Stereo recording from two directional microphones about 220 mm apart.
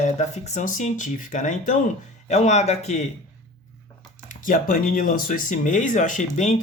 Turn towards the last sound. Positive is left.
turn(degrees=35)  # may be behind; listen again after turning